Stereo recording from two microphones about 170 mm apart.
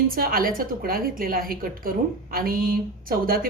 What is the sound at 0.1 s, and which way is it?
A woman's voice, 55° right (ahead or behind).